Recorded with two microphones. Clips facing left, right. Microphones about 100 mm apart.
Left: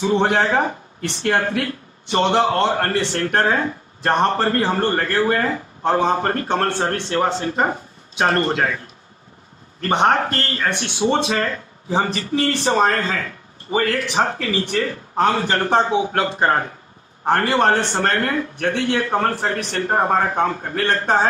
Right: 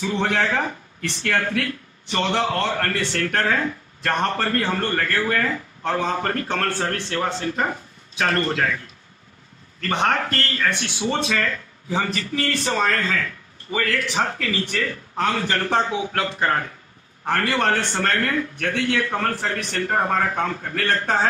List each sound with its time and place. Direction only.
0.0 s speech: 30° left (ahead or behind)